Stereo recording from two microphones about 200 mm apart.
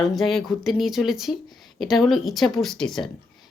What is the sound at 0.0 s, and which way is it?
Speech, centre (ahead or behind).